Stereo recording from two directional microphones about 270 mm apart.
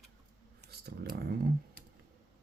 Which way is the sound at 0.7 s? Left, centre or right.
Right.